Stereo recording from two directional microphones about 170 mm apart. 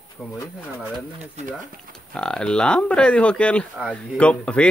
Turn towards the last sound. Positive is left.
turn(degrees=5)  # may be behind; listen again after turning